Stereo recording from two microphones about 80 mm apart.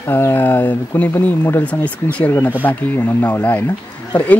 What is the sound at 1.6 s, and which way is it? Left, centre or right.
Speech, centre.